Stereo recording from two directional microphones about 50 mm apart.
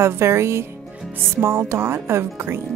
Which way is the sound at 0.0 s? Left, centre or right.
Right.